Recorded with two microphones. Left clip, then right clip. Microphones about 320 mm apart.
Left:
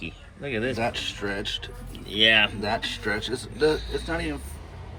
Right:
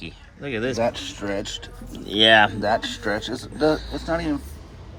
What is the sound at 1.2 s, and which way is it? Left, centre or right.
A man's voice, right.